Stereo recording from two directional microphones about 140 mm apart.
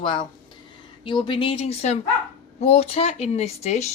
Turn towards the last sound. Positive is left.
turn(degrees=50)  # may be behind; listen again after turning